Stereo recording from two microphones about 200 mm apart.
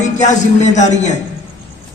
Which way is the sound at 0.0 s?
35° left (ahead or behind).